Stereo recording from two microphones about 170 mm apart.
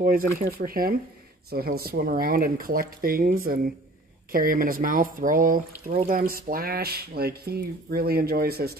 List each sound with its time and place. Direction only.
0.0 s speech: 55° right (ahead or behind)